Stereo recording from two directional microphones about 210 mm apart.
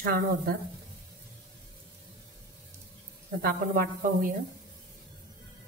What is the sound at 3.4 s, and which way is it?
Speech, 45° right (ahead or behind).